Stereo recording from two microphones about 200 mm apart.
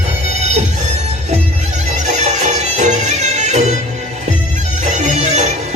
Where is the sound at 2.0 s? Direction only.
35° right (ahead or behind).